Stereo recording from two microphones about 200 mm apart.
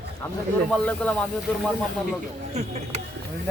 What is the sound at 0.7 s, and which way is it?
Speech, 5° left (ahead or behind).